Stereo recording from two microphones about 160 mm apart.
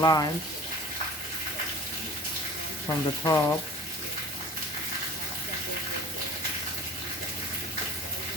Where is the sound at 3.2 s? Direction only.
15° left (ahead or behind).